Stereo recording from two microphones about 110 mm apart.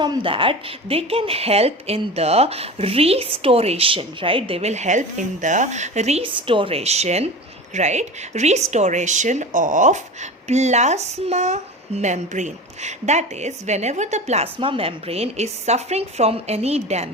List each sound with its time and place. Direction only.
0.0 s a woman's voice: 45° right (ahead or behind); by 6.2 s 85° right
6.2 s a woman's voice: 50° right (ahead or behind); by 7.3 s 80° right
7.7 s speech: 90° right
10.5 s speech: 90° right; by 17.1 s 75° right (ahead or behind)